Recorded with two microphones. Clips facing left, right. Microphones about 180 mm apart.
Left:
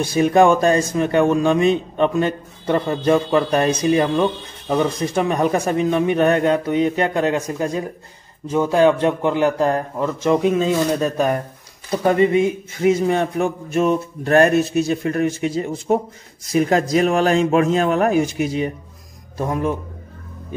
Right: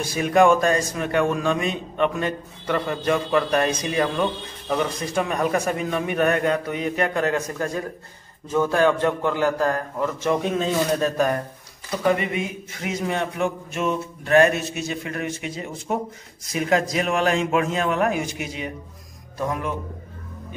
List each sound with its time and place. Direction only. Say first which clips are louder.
0.0 s speech: left 4 dB; 30° left (ahead or behind)
12.0 s a man's voice: left 7 dB; 30° left (ahead or behind)